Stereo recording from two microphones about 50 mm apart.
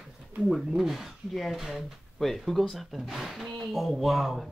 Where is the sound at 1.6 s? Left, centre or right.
Centre.